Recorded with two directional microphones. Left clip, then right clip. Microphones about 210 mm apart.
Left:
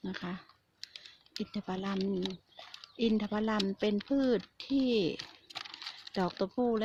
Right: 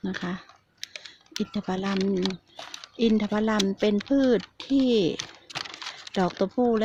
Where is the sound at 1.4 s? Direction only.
5° right (ahead or behind).